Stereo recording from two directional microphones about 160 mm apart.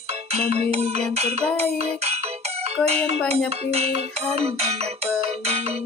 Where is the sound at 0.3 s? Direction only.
40° right (ahead or behind).